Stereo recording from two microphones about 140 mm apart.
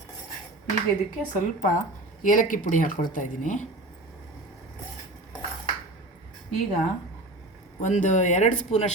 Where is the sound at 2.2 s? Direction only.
70° left (ahead or behind).